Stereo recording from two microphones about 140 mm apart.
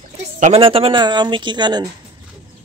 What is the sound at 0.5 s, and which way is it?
Speech, 40° right (ahead or behind).